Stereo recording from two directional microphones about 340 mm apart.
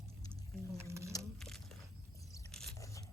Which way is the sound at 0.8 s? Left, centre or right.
Centre.